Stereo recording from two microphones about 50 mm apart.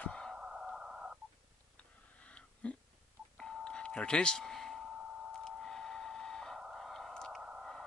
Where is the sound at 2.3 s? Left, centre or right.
Left.